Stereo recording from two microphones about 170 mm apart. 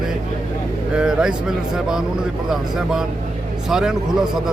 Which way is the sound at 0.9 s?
5° right (ahead or behind).